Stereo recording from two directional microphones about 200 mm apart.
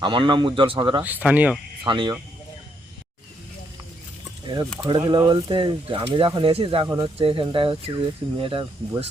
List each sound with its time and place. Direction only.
0.0 s speech: 25° right (ahead or behind)
1.0 s speech: 5° right (ahead or behind)
1.8 s speech: 25° right (ahead or behind)
4.4 s speech: 20° right (ahead or behind)